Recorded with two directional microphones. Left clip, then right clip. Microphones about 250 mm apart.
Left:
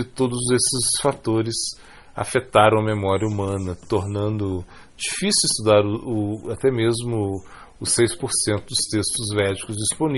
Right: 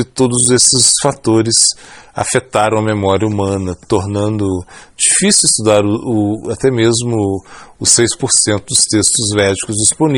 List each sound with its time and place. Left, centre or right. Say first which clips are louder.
0.0 s a man's voice: right 9 dB; right